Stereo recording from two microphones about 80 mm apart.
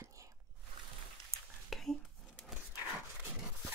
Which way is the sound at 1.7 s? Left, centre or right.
Centre.